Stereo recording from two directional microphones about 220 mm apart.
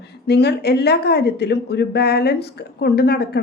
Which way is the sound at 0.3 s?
50° left (ahead or behind).